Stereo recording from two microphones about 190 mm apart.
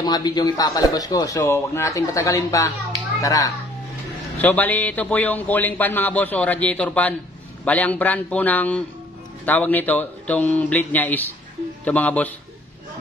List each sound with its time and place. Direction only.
0.0 s a man's voice: 20° left (ahead or behind)